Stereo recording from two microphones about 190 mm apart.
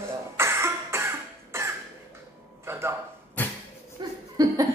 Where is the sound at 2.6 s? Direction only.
15° right (ahead or behind).